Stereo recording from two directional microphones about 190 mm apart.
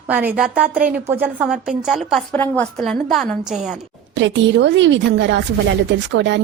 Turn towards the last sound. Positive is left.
turn(degrees=-70)  # may be behind; listen again after turning